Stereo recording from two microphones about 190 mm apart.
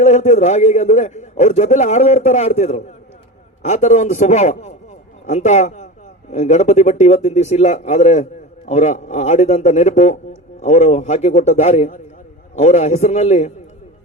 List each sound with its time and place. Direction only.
0.0 s a man's voice: 35° left (ahead or behind)